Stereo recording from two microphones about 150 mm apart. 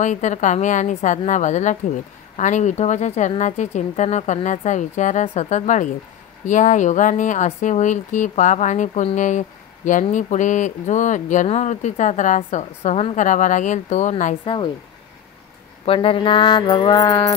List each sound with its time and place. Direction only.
0.0 s speech: 55° left (ahead or behind)
14.4 s speech: 35° left (ahead or behind)
15.8 s speech: 35° left (ahead or behind)
17.0 s music: 20° left (ahead or behind)